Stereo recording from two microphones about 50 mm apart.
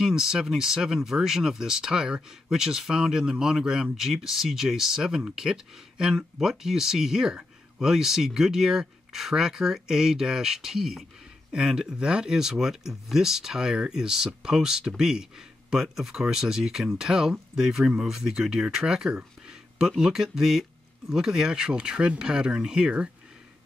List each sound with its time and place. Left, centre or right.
0.0 s speech: centre